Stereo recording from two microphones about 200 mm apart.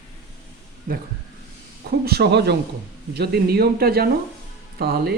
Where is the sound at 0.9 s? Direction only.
45° right (ahead or behind).